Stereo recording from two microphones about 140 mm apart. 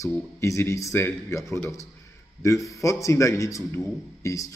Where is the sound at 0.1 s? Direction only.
20° left (ahead or behind).